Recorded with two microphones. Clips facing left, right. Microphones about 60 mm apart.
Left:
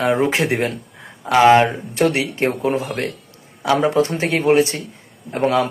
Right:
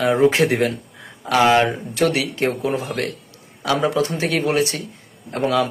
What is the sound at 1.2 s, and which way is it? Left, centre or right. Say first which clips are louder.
Speech: left 3 dB; left.